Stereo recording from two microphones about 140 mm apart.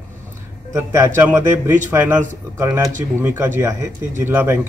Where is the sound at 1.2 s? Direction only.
15° right (ahead or behind).